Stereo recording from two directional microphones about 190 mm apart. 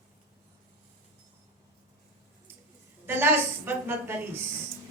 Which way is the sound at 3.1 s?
10° right (ahead or behind).